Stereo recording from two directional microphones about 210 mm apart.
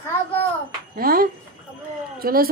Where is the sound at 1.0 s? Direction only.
45° right (ahead or behind).